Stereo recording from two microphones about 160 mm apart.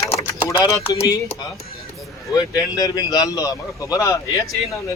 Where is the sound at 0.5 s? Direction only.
20° left (ahead or behind).